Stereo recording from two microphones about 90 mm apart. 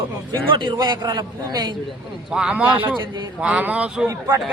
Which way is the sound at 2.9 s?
60° right (ahead or behind).